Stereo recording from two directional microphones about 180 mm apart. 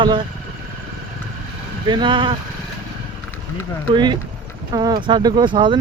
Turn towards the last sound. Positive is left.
turn(degrees=-25)  # may be behind; listen again after turning